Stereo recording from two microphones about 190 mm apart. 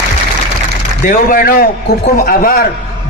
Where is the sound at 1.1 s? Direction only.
45° left (ahead or behind).